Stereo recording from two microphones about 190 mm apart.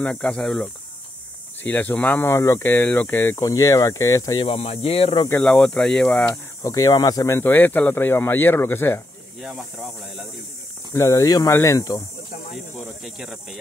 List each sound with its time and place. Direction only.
0.0 s speech: 5° left (ahead or behind)
1.7 s speech: 10° left (ahead or behind); by 5.3 s 30° left (ahead or behind)
5.4 s speech: 5° left (ahead or behind)
10.9 s speech: 15° left (ahead or behind)
13.0 s speech: centre (ahead or behind)